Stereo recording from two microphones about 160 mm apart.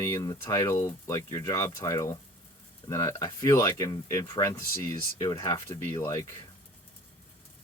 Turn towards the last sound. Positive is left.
turn(degrees=20)  # may be behind; listen again after turning